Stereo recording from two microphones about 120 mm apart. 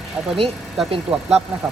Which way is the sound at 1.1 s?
50° right (ahead or behind).